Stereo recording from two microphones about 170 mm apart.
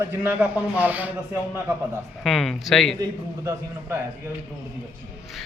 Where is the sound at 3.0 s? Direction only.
15° right (ahead or behind).